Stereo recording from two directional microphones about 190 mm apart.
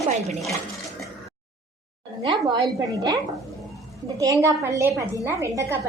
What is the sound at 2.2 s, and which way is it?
Speech, 25° right (ahead or behind).